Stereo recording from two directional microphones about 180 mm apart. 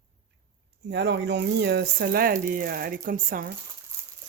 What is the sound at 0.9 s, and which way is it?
Speech, 70° right (ahead or behind).